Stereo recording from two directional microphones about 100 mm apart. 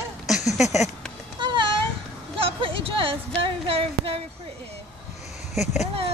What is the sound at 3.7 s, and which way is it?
Speech, 70° right (ahead or behind).